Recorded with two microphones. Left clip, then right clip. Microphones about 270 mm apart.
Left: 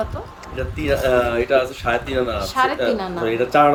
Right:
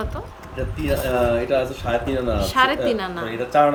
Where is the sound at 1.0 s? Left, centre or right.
Centre.